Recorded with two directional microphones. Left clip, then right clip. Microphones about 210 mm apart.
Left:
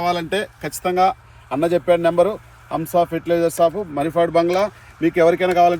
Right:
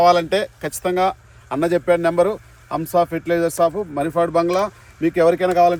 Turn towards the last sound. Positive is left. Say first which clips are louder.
# even
turn(degrees=0)  # may be behind; listen again after turning